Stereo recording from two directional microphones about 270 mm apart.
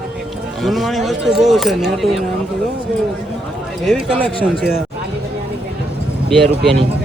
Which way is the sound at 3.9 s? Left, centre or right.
Centre.